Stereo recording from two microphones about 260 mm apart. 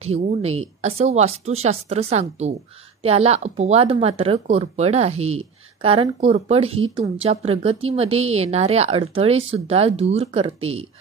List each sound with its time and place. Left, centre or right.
0.0 s speech: right